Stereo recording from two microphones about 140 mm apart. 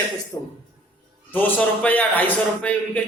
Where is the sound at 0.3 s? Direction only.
25° left (ahead or behind).